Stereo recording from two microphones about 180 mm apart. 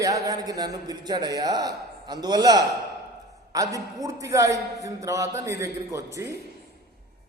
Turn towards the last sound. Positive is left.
turn(degrees=-15)  # may be behind; listen again after turning